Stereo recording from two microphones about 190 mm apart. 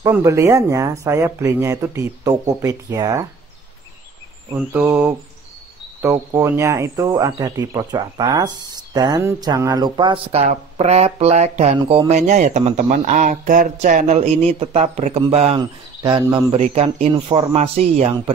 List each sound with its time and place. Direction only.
0.0 s speech: 15° right (ahead or behind)
4.6 s speech: 10° right (ahead or behind); by 18.1 s 35° right (ahead or behind)